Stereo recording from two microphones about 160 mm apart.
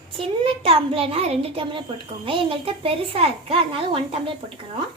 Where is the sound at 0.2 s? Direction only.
35° right (ahead or behind).